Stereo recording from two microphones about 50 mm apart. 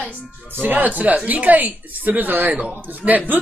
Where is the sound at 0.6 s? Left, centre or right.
Right.